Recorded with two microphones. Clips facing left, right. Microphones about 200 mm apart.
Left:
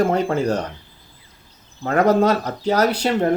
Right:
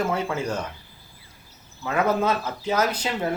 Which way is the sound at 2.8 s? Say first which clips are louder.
Left 5 dB; 70° left (ahead or behind).